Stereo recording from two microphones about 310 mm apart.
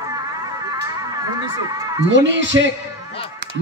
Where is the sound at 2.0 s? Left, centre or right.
Right.